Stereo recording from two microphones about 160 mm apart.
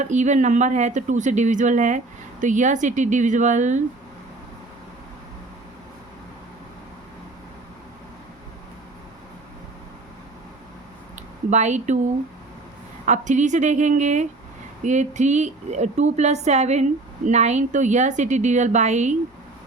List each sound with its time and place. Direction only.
0.0 s a woman's voice: 50° right (ahead or behind)
11.5 s a woman's voice: 45° right (ahead or behind)
13.1 s a woman's voice: 50° right (ahead or behind)